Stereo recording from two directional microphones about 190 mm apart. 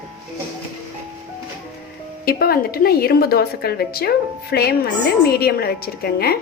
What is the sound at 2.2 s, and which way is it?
A woman's voice, 55° left (ahead or behind).